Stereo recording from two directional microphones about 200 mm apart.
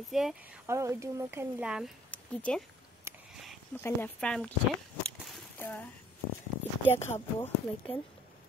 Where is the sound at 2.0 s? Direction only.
5° left (ahead or behind).